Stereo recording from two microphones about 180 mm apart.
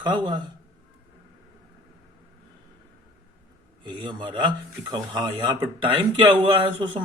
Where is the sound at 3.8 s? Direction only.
25° right (ahead or behind).